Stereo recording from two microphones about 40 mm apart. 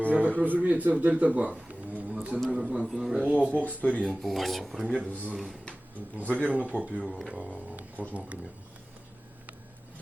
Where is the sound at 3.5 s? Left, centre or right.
Left.